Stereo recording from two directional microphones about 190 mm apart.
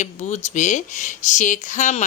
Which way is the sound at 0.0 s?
40° left (ahead or behind).